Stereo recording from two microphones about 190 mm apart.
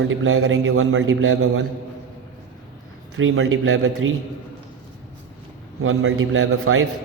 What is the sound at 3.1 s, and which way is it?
A man's voice, 90° right.